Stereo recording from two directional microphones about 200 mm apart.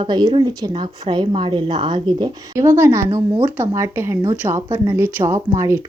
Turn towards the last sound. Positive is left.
turn(degrees=-15)  # may be behind; listen again after turning